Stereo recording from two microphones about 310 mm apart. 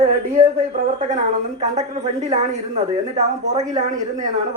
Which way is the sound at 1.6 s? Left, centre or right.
Right.